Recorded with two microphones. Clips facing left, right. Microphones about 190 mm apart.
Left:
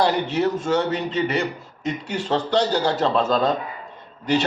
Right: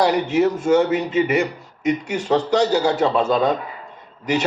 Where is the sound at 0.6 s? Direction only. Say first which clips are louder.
Right 5 dB; 15° right (ahead or behind).